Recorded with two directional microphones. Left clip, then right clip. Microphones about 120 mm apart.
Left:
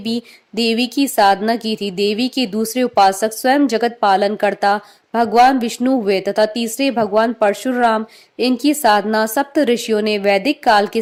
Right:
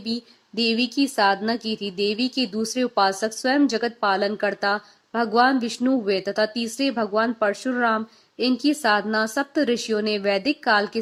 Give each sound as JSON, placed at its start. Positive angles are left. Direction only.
{"t": 0.0, "sound": "speech", "side_deg": 40}